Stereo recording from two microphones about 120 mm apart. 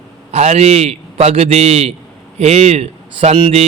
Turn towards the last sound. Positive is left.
turn(degrees=-65)  # may be behind; listen again after turning